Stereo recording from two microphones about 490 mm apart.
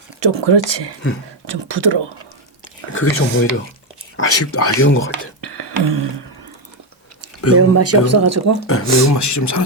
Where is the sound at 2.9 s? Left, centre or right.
Left.